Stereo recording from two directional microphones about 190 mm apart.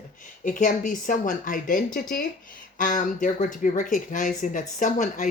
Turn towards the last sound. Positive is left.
turn(degrees=40)  # may be behind; listen again after turning